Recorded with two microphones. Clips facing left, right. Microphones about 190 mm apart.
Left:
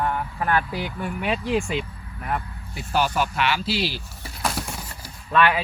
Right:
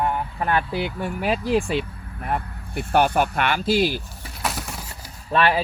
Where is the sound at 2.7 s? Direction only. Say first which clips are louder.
Right 4 dB; 60° right (ahead or behind).